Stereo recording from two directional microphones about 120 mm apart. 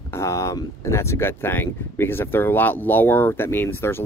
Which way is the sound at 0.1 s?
25° left (ahead or behind).